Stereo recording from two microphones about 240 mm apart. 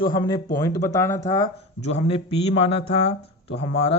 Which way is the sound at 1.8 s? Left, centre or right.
Left.